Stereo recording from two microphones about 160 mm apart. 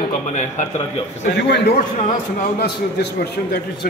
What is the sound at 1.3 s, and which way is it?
A man's voice, 90° left.